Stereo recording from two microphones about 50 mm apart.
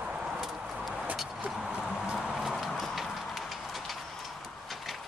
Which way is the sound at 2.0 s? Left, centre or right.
Centre.